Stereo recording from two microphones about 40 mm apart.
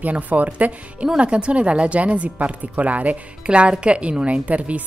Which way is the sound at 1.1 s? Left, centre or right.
Right.